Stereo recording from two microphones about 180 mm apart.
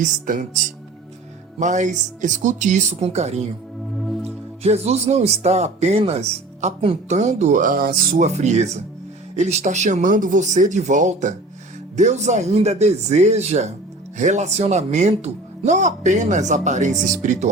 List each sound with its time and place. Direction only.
0.0 s speech: 45° right (ahead or behind)
3.9 s music: centre (ahead or behind)
4.2 s speech: 35° right (ahead or behind)